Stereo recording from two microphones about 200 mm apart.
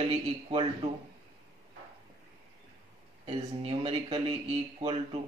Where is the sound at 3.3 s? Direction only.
30° right (ahead or behind).